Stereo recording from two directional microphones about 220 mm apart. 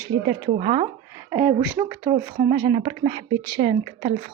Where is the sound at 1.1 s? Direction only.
10° right (ahead or behind).